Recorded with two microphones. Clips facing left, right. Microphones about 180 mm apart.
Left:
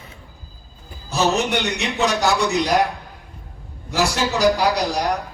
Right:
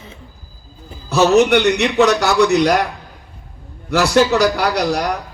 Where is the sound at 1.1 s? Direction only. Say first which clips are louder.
Right 8 dB; 70° right (ahead or behind).